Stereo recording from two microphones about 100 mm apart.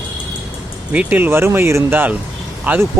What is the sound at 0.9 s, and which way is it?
Speech, 15° right (ahead or behind).